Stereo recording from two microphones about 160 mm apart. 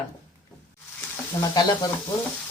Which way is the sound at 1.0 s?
25° left (ahead or behind).